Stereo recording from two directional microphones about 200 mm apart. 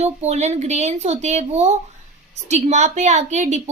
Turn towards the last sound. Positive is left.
turn(degrees=-35)  # may be behind; listen again after turning